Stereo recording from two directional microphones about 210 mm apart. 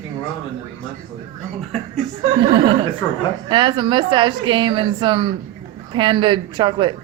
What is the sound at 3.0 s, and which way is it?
Speech, 15° left (ahead or behind).